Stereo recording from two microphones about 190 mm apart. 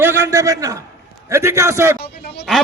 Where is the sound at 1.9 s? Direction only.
60° left (ahead or behind).